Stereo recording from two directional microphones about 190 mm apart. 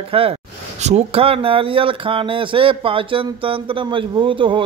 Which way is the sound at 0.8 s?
35° right (ahead or behind).